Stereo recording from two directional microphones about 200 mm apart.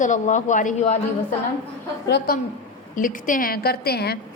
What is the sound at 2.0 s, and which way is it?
Speech, 50° left (ahead or behind).